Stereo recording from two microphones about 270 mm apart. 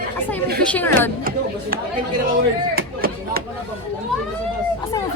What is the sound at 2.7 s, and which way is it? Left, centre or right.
Chop, right.